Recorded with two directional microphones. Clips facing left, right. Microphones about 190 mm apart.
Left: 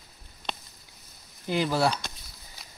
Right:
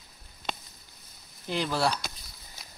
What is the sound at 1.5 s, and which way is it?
Speech, 5° left (ahead or behind).